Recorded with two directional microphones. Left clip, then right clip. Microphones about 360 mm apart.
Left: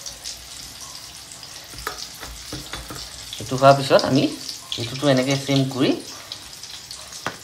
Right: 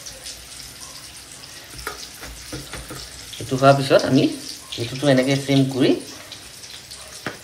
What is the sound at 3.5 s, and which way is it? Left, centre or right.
Speech, left.